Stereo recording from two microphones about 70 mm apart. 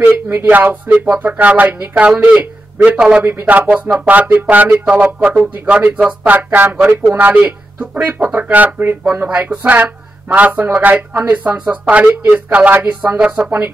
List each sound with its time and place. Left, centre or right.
0.0 s speech: right
3.3 s speech: right